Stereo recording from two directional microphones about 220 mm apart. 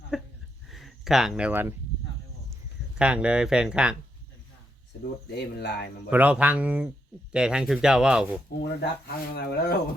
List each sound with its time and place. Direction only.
0.1 s a sound: centre (ahead or behind)
0.7 s speech: centre (ahead or behind)
3.0 s speech: 5° right (ahead or behind)
5.4 s speech: 50° left (ahead or behind)
6.1 s speech: 5° right (ahead or behind)
8.6 s speech: 50° left (ahead or behind)